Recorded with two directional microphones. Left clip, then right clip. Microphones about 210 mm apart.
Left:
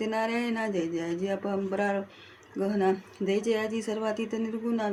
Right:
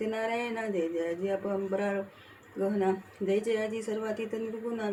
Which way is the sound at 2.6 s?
55° left (ahead or behind).